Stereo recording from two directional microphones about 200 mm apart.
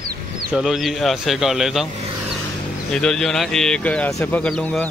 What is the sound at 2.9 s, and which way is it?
Speech, 5° left (ahead or behind).